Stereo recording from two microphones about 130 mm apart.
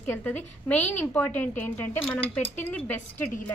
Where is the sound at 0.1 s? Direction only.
10° left (ahead or behind).